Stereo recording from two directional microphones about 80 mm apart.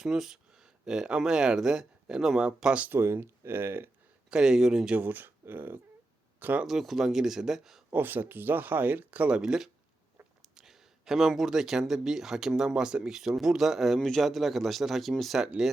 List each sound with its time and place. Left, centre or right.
0.0 s speech: centre
2.9 s speech: right
4.3 s speech: centre
4.9 s speech: right
6.7 s speech: centre
7.9 s speech: right; by 15.7 s centre